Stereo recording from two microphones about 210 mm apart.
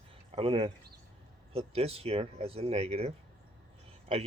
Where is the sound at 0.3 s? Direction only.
25° right (ahead or behind).